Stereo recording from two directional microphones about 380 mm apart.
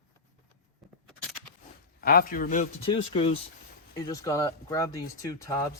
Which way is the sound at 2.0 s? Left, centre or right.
Left.